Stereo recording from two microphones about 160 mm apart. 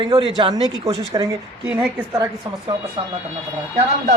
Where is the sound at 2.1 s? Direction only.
25° right (ahead or behind).